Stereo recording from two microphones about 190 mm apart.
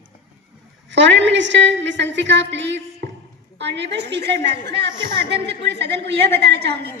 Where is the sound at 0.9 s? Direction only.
70° right (ahead or behind).